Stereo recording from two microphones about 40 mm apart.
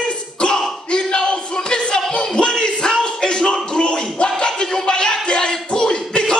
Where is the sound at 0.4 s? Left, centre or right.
Centre.